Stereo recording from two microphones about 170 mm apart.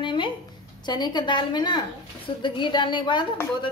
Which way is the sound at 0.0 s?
30° left (ahead or behind).